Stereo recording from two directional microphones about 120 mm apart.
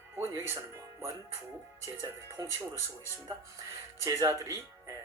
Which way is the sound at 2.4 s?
30° right (ahead or behind).